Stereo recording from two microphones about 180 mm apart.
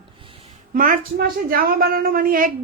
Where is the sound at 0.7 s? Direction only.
50° right (ahead or behind).